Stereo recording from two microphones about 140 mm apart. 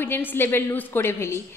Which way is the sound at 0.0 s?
15° left (ahead or behind).